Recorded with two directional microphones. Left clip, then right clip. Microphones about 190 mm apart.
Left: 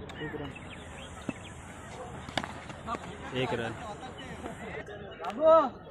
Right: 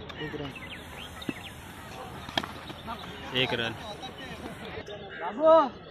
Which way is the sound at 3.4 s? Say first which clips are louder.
Right 4 dB; centre (ahead or behind).